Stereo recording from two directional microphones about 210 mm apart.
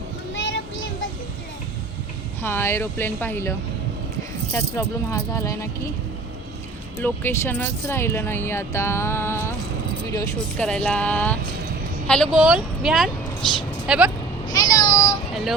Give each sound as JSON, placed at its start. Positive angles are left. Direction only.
{"t": 2.4, "sound": "speech", "side_deg": 10}
{"t": 4.5, "sound": "speech", "side_deg": 15}
{"t": 7.0, "sound": "speech", "side_deg": 10}
{"t": 14.5, "sound": "a sound", "side_deg": 20}